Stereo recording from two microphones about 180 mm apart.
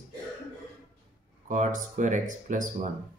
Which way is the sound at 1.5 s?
45° right (ahead or behind).